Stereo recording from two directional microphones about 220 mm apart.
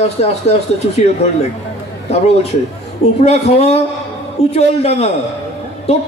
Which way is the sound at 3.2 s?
30° left (ahead or behind).